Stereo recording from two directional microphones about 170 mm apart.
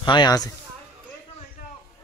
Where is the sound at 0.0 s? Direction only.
25° left (ahead or behind).